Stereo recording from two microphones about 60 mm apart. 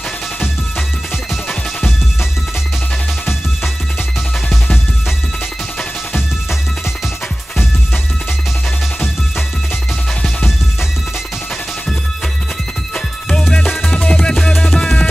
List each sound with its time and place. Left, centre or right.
13.5 s music: centre